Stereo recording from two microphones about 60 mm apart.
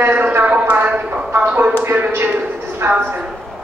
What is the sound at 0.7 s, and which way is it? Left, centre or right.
A man's voice, right.